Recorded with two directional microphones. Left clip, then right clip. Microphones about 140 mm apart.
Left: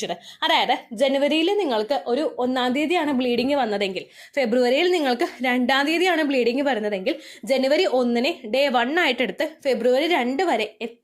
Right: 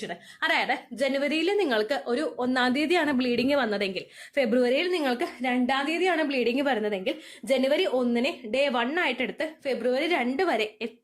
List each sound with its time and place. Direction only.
0.0 s a woman's voice: 30° left (ahead or behind)